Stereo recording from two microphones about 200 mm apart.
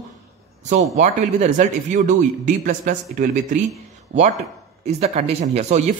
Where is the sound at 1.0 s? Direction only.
35° right (ahead or behind).